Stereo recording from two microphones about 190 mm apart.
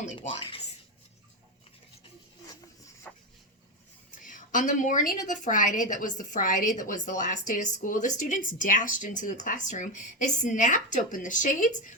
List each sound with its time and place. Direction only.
0.2 s speech: 30° left (ahead or behind)
3.1 s a sound: 10° left (ahead or behind)
4.1 s a woman's voice: 45° left (ahead or behind)